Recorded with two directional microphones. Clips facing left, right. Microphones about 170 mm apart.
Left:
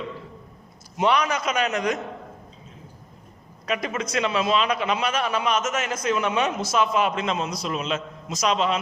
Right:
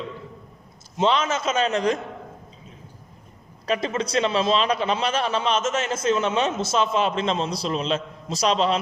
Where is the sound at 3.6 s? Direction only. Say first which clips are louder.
Right 3 dB; 30° right (ahead or behind).